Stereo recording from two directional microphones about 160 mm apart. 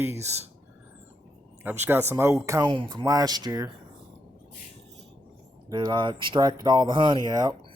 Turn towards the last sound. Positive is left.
turn(degrees=-25)  # may be behind; listen again after turning